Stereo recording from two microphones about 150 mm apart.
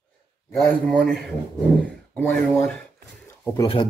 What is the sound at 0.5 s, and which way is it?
Speech, 5° left (ahead or behind).